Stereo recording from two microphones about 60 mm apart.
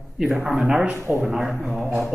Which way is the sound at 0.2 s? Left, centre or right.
Centre.